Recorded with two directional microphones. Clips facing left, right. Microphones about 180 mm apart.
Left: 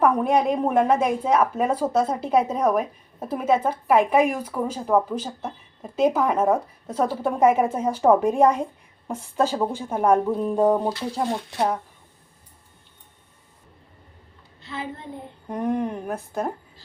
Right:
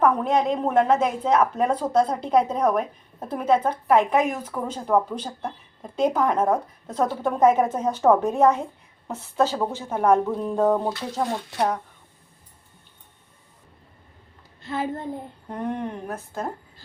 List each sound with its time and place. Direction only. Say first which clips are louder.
0.0 s speech: left 1 dB; 10° left (ahead or behind)
14.6 s a woman's voice: right 6 dB; 50° right (ahead or behind)
15.4 s speech: left 4 dB; 10° left (ahead or behind)